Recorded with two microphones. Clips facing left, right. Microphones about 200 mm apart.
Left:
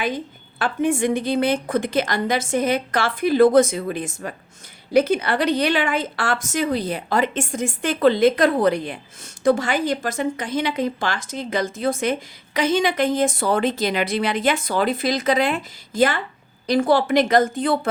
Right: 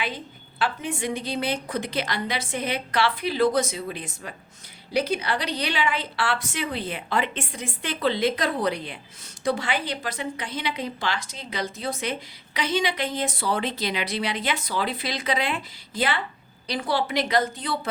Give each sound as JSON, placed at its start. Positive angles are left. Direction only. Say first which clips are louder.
{"t": 0.6, "sound": "a woman's voice", "louder": "left 7 dB", "side_deg": 50}